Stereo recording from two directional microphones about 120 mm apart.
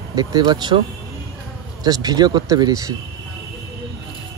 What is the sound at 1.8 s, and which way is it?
Speech, 30° right (ahead or behind).